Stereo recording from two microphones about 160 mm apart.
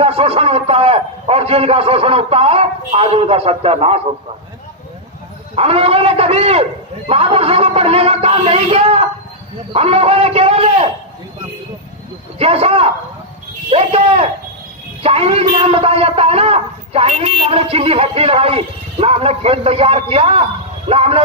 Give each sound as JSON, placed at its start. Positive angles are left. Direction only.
{"t": 0.0, "sound": "a man's voice", "side_deg": -40}
{"t": 5.5, "sound": "a man's voice", "side_deg": -40}
{"t": 12.4, "sound": "a man's voice", "side_deg": -40}